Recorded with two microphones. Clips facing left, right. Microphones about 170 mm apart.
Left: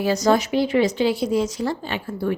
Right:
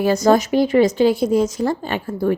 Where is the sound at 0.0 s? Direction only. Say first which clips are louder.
Right 4 dB; 50° right (ahead or behind).